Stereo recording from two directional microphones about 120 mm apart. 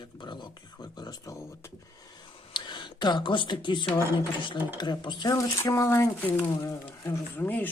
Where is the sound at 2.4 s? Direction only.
40° left (ahead or behind).